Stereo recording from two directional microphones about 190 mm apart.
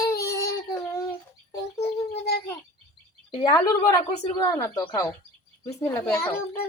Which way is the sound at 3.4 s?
20° left (ahead or behind).